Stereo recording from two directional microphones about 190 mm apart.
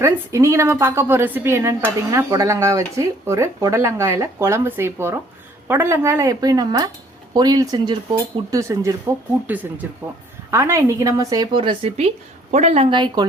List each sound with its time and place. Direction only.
0.0 s a woman's voice: 15° right (ahead or behind)
10.5 s a woman's voice: 15° right (ahead or behind)